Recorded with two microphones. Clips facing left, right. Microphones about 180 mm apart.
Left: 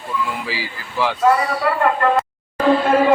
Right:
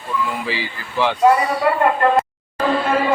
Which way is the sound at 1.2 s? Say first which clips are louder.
Right 2 dB; 20° right (ahead or behind).